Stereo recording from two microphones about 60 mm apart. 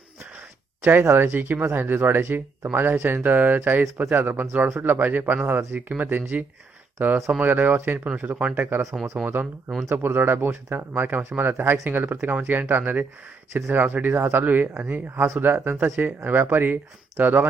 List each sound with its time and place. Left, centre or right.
0.8 s speech: right